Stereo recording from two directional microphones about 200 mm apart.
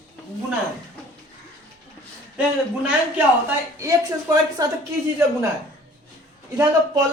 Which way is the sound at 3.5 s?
15° right (ahead or behind).